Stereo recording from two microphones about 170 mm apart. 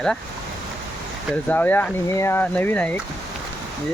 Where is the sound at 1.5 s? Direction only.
10° left (ahead or behind).